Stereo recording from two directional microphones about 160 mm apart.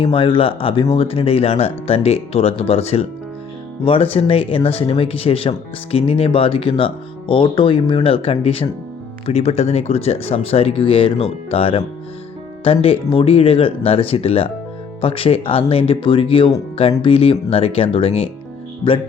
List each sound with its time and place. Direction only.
0.0 s speech: 35° left (ahead or behind)